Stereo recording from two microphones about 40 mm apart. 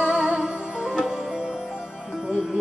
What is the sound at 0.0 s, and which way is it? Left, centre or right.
Music, right.